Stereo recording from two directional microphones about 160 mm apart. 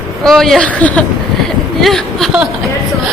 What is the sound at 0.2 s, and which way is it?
Speech, centre (ahead or behind).